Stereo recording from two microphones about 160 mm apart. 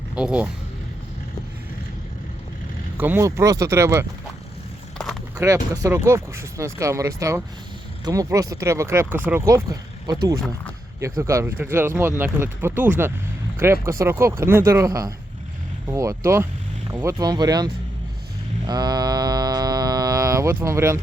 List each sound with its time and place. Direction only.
0.2 s speech: 5° right (ahead or behind)
3.0 s speech: 15° right (ahead or behind)
5.4 s speech: 20° right (ahead or behind)
11.2 s speech: 15° right (ahead or behind)
17.2 s speech: 25° right (ahead or behind)
18.6 s mantra: 25° right (ahead or behind)